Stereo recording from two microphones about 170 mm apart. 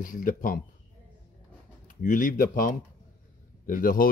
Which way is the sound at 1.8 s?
50° left (ahead or behind).